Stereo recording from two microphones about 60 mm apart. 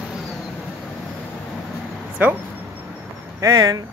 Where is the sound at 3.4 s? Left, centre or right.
Right.